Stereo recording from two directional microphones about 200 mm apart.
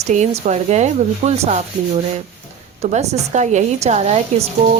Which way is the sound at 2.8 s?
35° right (ahead or behind).